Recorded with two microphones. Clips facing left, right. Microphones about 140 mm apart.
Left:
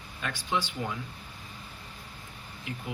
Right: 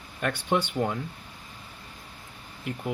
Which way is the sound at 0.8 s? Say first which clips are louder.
Right 7 dB; 80° right.